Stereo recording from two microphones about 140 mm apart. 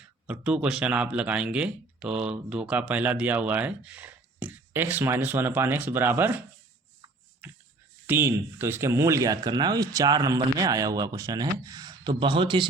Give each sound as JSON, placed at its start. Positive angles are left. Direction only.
{"t": 0.3, "sound": "speech", "side_deg": -10}
{"t": 7.4, "sound": "a sound", "side_deg": -10}
{"t": 8.0, "sound": "speech", "side_deg": -15}